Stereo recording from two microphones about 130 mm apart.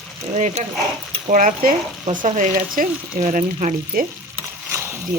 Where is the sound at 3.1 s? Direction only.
85° right.